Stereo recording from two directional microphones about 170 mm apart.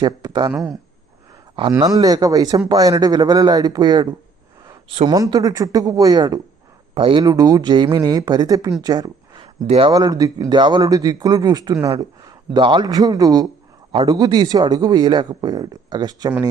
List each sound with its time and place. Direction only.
0.0 s speech: 20° right (ahead or behind)
0.5 s speech: 5° right (ahead or behind)
1.8 s speech: 20° right (ahead or behind)
8.8 s a sound: 20° right (ahead or behind)
9.6 s speech: 35° right (ahead or behind)
9.9 s speech: 20° right (ahead or behind)